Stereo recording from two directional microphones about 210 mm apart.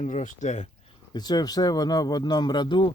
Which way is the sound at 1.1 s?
20° left (ahead or behind).